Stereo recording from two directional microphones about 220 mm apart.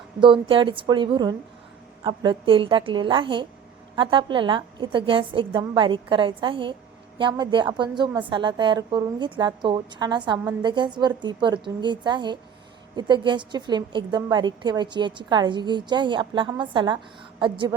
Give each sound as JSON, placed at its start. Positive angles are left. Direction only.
{"t": 0.2, "sound": "a woman's voice", "side_deg": -20}